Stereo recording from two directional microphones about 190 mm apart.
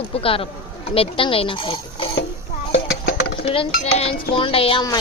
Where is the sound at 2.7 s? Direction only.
55° left (ahead or behind).